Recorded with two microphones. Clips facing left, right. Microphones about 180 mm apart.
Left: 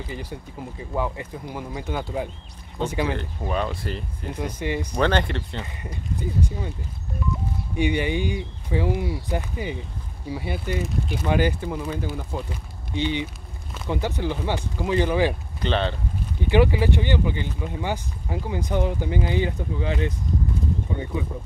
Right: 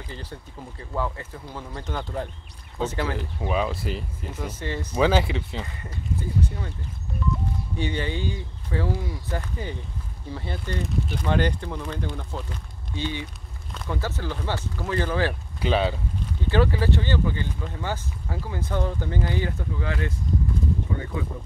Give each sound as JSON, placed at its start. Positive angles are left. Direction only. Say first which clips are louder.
{"t": 0.1, "sound": "speech", "louder": "left 4 dB", "side_deg": 15}
{"t": 3.2, "sound": "speech", "louder": "right 1 dB", "side_deg": -5}
{"t": 4.6, "sound": "speech", "louder": "left 5 dB", "side_deg": 15}
{"t": 4.9, "sound": "speech", "louder": "right 2 dB", "side_deg": -5}
{"t": 5.8, "sound": "speech", "louder": "left 1 dB", "side_deg": 15}
{"t": 7.7, "sound": "speech", "louder": "left 6 dB", "side_deg": 15}
{"t": 15.6, "sound": "speech", "louder": "right 1 dB", "side_deg": -5}
{"t": 16.3, "sound": "speech", "louder": "left 3 dB", "side_deg": 15}